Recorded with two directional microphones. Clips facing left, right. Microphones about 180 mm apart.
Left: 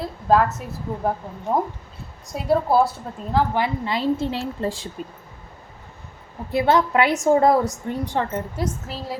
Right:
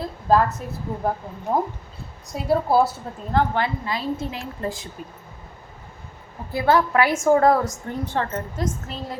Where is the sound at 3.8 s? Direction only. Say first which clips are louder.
Left 4 dB; 25° left (ahead or behind).